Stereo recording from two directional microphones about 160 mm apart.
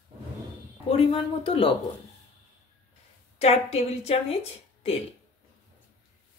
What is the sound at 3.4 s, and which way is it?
A woman's voice, 40° left (ahead or behind).